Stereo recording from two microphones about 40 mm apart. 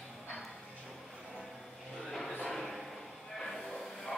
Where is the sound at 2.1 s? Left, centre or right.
Centre.